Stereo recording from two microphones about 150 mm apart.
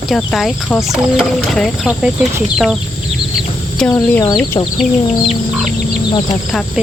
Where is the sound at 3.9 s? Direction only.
25° left (ahead or behind).